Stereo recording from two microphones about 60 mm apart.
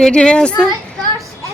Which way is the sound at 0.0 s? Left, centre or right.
Centre.